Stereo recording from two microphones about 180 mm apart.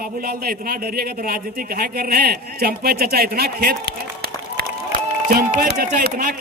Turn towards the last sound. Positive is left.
turn(degrees=-50)  # may be behind; listen again after turning